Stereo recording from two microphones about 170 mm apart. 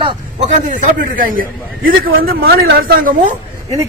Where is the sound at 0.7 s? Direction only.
50° right (ahead or behind).